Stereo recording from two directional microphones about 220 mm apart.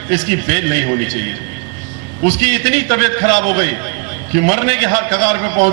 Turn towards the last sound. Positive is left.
turn(degrees=-15)  # may be behind; listen again after turning